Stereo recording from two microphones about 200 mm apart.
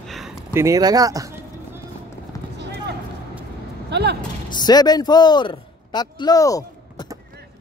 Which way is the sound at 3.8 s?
60° right (ahead or behind).